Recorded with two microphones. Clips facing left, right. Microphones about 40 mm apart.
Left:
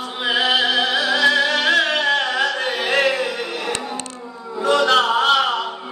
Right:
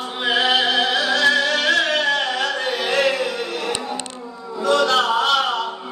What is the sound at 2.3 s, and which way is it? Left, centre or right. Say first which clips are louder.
Carnatic music: left 2 dB; centre.